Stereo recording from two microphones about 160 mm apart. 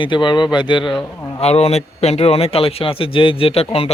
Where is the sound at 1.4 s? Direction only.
40° left (ahead or behind).